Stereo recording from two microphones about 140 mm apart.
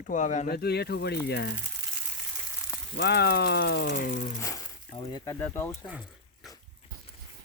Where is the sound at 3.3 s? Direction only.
90° left.